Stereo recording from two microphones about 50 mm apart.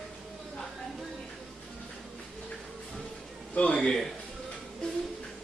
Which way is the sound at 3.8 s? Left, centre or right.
Centre.